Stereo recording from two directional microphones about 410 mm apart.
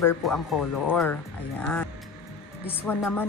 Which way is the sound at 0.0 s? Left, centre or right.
Centre.